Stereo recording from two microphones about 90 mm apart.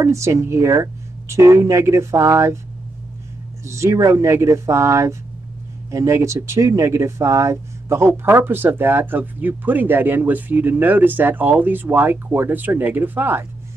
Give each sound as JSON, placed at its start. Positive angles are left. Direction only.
{"t": 0.0, "sound": "speech", "side_deg": -35}
{"t": 3.6, "sound": "speech", "side_deg": -30}